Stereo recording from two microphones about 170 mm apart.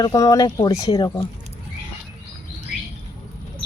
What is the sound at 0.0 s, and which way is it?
Speech, 20° left (ahead or behind).